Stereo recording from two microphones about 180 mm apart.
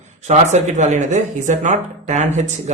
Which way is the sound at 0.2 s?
40° right (ahead or behind).